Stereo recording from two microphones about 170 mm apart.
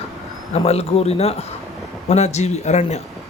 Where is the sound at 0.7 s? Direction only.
40° left (ahead or behind).